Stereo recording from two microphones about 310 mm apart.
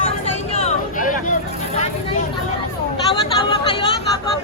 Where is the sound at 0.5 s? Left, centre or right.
Left.